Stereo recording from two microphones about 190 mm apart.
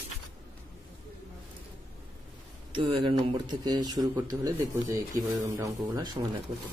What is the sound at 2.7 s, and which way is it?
Speech, 25° right (ahead or behind).